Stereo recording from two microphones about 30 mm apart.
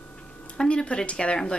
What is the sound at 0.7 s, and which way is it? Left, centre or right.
Speech, left.